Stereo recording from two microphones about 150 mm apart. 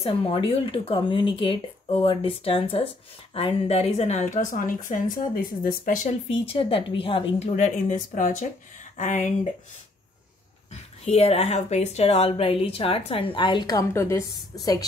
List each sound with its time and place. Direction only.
0.0 s a woman's voice: 35° left (ahead or behind); by 5.9 s 75° left (ahead or behind)
6.0 s speech: 40° left (ahead or behind)
10.7 s speech: 45° left (ahead or behind); by 14.9 s 25° left (ahead or behind)